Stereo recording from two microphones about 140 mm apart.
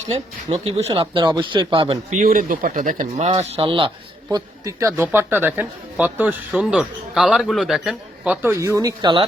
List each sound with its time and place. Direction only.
0.0 s speech: 50° right (ahead or behind)
2.0 s speech: 70° right (ahead or behind)
3.2 s a man's voice: 45° right (ahead or behind)